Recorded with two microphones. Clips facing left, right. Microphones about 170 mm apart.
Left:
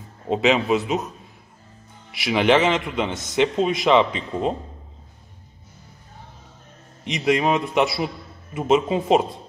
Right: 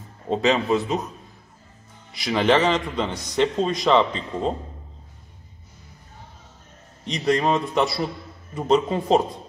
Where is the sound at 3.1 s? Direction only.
5° left (ahead or behind).